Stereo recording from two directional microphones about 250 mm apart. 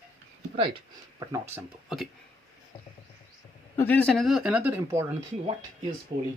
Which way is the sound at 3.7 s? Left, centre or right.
Centre.